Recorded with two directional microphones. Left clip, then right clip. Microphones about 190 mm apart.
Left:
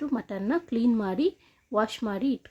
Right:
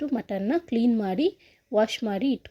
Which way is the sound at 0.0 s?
5° right (ahead or behind).